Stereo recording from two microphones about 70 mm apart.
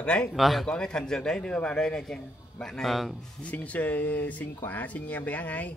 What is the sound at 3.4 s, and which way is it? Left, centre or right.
Speech, left.